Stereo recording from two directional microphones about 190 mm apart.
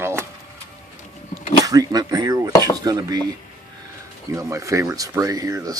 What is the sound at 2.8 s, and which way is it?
Speech, 20° right (ahead or behind).